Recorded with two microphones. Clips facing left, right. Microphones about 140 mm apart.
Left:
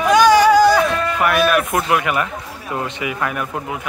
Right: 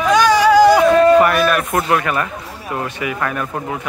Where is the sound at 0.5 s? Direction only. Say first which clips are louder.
Right 2 dB; 15° right (ahead or behind).